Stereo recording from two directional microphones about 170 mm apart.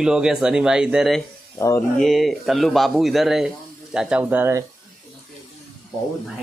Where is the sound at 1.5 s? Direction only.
20° left (ahead or behind).